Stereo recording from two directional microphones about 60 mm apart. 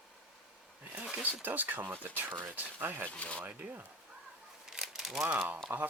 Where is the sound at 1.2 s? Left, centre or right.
Right.